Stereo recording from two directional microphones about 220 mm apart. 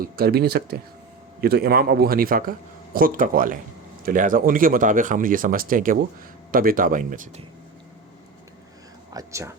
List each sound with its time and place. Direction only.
0.0 s speech: 45° right (ahead or behind)
9.1 s speech: 15° right (ahead or behind)